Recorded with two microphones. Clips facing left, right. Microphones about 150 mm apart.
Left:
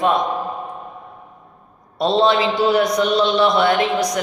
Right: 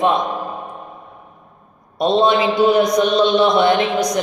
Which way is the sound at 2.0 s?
20° right (ahead or behind).